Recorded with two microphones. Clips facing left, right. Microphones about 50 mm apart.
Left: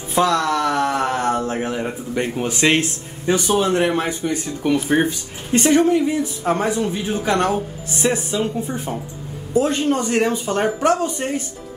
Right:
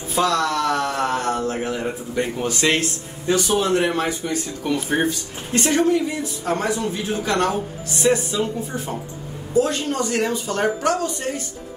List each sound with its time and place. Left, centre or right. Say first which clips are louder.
0.1 s speech: left 2 dB; left